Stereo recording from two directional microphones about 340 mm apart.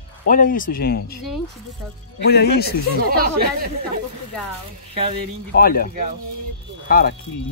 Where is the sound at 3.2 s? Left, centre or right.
Right.